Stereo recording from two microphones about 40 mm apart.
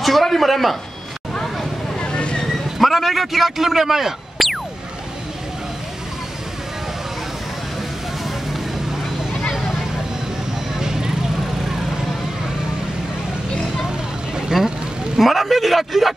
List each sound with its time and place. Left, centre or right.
0.0 s a man's voice: centre
2.0 s vehicle: left
2.8 s speech: centre
10.8 s vehicle: centre
14.3 s vehicle: centre
15.1 s speech: centre